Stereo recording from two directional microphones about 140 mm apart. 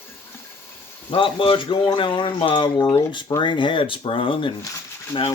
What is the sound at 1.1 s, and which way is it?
Speech, 35° left (ahead or behind).